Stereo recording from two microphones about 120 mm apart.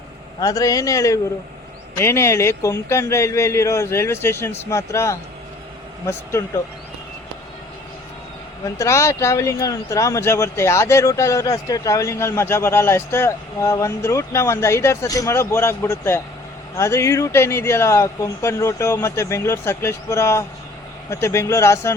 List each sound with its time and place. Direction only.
0.3 s speech: 30° left (ahead or behind)
8.8 s speech: 25° left (ahead or behind)